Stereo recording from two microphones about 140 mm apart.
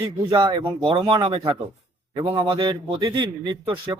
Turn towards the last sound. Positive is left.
turn(degrees=-35)  # may be behind; listen again after turning